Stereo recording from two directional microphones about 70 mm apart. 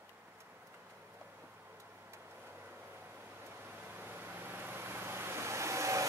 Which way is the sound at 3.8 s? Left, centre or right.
Right.